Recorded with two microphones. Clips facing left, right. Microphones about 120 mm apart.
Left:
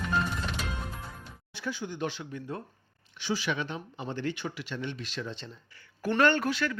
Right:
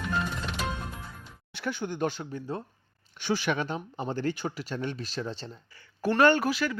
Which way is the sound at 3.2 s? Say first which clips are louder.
Right 3 dB; 55° right (ahead or behind).